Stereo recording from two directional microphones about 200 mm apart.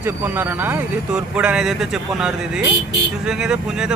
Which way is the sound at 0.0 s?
10° right (ahead or behind).